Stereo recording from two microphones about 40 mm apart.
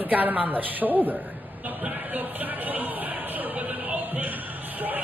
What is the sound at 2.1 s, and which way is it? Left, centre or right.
Speech, right.